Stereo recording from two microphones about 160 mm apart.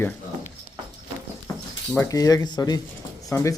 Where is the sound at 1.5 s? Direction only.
25° left (ahead or behind).